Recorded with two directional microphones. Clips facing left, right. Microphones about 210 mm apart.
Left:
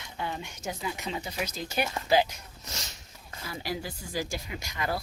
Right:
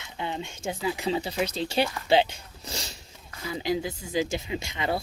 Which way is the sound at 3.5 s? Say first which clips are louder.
Right 7 dB; 20° right (ahead or behind).